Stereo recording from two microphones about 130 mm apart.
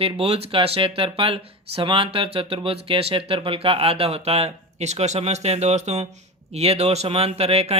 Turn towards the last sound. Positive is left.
turn(degrees=-55)  # may be behind; listen again after turning